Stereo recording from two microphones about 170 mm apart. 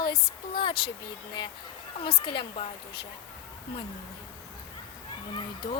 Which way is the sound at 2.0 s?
30° left (ahead or behind).